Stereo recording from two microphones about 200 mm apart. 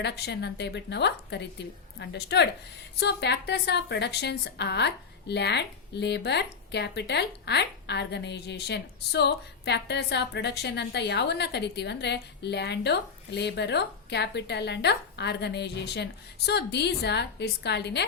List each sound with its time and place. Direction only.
0.0 s a woman's voice: 55° left (ahead or behind)